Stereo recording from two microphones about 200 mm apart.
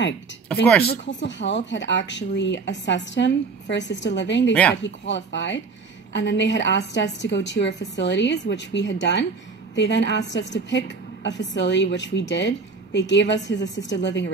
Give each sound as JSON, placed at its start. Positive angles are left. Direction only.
{"t": 0.8, "sound": "speech", "side_deg": 60}